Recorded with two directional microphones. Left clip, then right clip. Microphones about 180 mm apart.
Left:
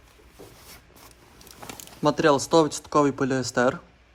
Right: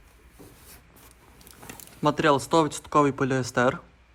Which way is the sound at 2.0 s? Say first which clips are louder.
Left 1 dB; 15° left (ahead or behind).